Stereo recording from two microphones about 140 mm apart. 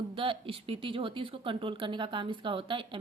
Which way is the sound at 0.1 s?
40° right (ahead or behind).